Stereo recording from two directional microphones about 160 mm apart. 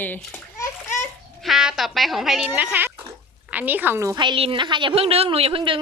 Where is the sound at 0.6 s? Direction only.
20° left (ahead or behind).